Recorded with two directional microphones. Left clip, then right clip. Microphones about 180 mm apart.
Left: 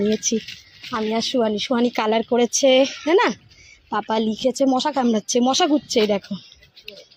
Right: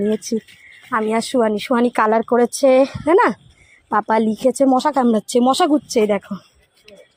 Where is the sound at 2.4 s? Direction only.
55° right (ahead or behind).